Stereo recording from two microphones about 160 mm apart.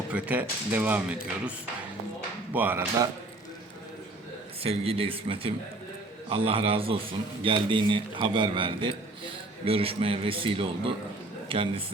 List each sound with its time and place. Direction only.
0.1 s speech: 10° right (ahead or behind)
4.6 s a man's voice: 40° right (ahead or behind)